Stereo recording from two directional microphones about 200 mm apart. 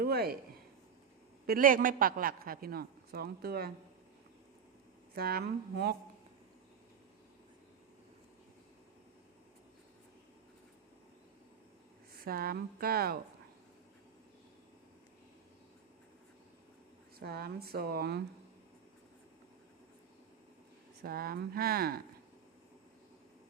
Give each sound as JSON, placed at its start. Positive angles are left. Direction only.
{"t": 0.0, "sound": "speech", "side_deg": -50}
{"t": 1.5, "sound": "a man's voice", "side_deg": -45}
{"t": 5.1, "sound": "a man's voice", "side_deg": -50}
{"t": 12.2, "sound": "a man's voice", "side_deg": -50}
{"t": 17.2, "sound": "a man's voice", "side_deg": -50}
{"t": 21.0, "sound": "a man's voice", "side_deg": -50}